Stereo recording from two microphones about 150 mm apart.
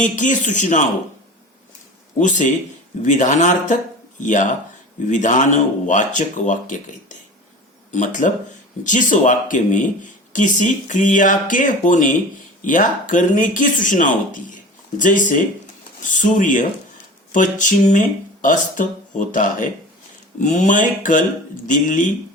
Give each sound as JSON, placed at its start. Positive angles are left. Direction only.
{"t": 0.0, "sound": "speech", "side_deg": 55}
{"t": 2.1, "sound": "speech", "side_deg": 55}